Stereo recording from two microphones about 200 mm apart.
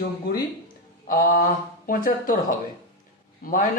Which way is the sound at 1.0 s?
45° left (ahead or behind).